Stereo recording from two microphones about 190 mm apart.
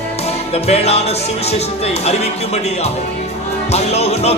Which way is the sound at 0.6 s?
35° left (ahead or behind).